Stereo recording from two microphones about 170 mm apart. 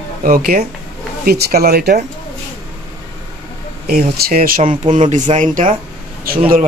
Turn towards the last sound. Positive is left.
turn(degrees=-55)  # may be behind; listen again after turning